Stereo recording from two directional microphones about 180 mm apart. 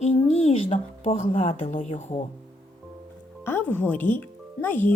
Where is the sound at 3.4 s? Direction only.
10° left (ahead or behind).